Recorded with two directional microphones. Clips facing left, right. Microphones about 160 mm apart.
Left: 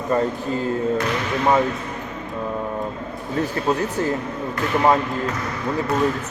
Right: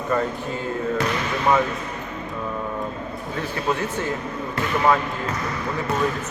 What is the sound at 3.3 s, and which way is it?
Speech, 35° left (ahead or behind).